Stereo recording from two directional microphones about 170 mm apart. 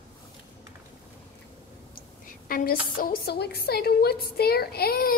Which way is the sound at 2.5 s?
55° left (ahead or behind).